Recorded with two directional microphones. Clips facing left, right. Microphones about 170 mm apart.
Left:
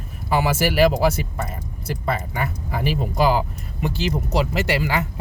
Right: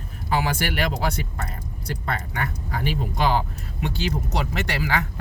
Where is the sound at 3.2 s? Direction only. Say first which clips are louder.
Left 4 dB; 5° left (ahead or behind).